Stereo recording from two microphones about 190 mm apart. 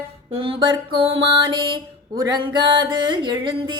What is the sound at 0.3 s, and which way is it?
Music, 30° right (ahead or behind).